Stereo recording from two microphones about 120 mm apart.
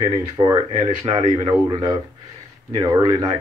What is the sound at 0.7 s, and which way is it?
Speech, 50° right (ahead or behind).